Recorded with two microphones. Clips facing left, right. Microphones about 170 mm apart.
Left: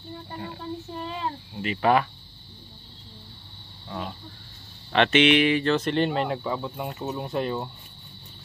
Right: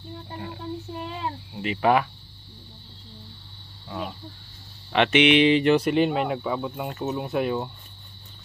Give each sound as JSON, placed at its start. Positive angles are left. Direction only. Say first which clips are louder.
{"t": 1.5, "sound": "speech", "louder": "right 1 dB", "side_deg": -15}
{"t": 4.9, "sound": "speech", "louder": "right 1 dB", "side_deg": -15}